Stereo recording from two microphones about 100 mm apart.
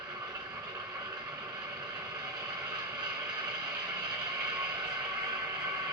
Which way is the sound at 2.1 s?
45° right (ahead or behind).